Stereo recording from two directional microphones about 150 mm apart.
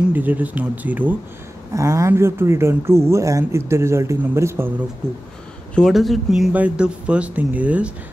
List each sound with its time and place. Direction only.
0.1 s speech: 10° right (ahead or behind)
5.8 s speech: centre (ahead or behind)